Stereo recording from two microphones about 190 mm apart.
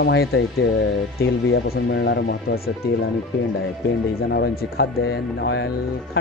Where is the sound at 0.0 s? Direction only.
65° left (ahead or behind).